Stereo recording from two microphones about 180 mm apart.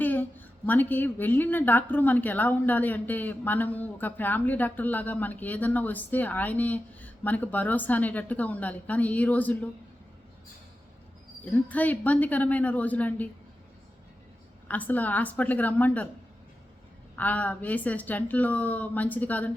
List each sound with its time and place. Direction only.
0.0 s a woman's voice: 10° left (ahead or behind)
11.4 s a woman's voice: 10° left (ahead or behind)
14.7 s a woman's voice: 10° left (ahead or behind)
17.2 s a woman's voice: 10° left (ahead or behind)